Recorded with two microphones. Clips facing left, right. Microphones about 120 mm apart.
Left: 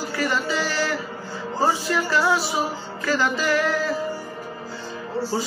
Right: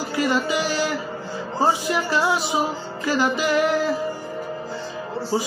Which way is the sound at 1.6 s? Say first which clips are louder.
Right 1 dB; 15° right (ahead or behind).